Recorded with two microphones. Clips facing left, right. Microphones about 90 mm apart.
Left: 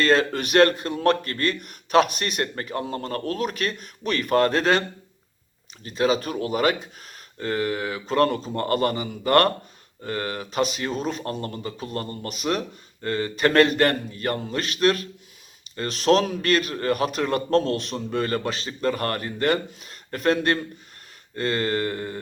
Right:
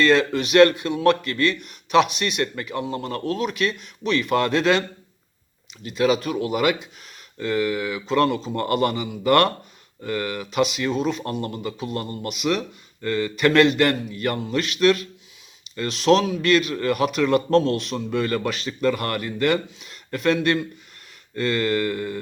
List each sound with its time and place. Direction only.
0.0 s a man's voice: 40° left (ahead or behind)
5.8 s a man's voice: 35° left (ahead or behind)